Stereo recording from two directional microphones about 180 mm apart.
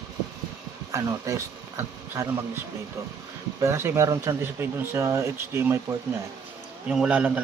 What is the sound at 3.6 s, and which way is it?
Speech, 15° right (ahead or behind).